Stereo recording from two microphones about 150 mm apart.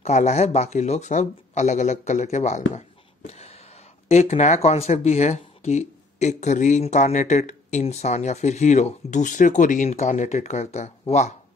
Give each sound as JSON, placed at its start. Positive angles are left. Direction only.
{"t": 0.0, "sound": "speech", "side_deg": 50}
{"t": 3.3, "sound": "a sound", "side_deg": 45}
{"t": 4.1, "sound": "speech", "side_deg": 45}